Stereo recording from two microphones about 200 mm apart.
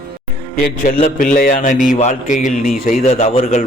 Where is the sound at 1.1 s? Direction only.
45° left (ahead or behind).